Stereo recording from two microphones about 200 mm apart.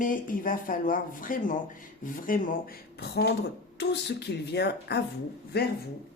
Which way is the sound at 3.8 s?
60° left (ahead or behind).